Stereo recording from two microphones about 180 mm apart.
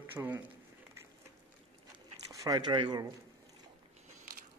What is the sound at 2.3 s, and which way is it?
Speech, 20° right (ahead or behind).